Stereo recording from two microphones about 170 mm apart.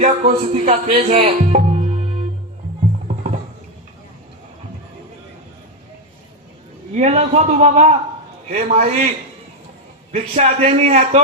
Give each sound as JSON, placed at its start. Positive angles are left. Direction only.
{"t": 0.0, "sound": "speech", "side_deg": -45}
{"t": 6.9, "sound": "a man's voice", "side_deg": -40}